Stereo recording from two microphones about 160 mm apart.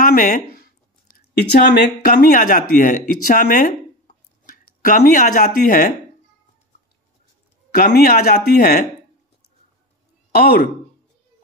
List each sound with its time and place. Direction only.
0.0 s a sound: 60° left (ahead or behind)
1.1 s speech: 85° left; by 5.9 s 60° left (ahead or behind)
7.7 s speech: 70° left (ahead or behind)
10.3 s speech: 80° left